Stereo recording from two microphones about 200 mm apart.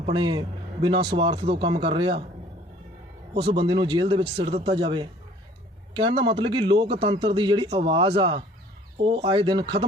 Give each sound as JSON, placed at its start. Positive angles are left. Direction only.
{"t": 0.0, "sound": "a man's voice", "side_deg": -25}
{"t": 3.4, "sound": "a man's voice", "side_deg": -25}